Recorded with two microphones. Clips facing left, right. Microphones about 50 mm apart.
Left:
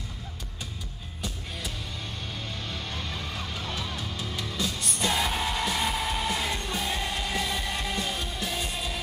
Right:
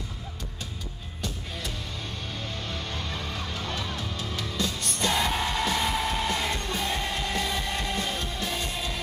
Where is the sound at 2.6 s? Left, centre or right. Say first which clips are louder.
Right 1 dB; centre.